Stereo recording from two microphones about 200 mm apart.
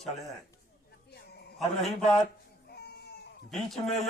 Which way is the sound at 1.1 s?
55° left (ahead or behind).